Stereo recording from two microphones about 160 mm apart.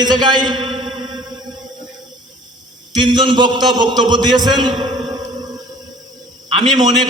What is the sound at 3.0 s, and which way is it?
A man's voice, 30° right (ahead or behind).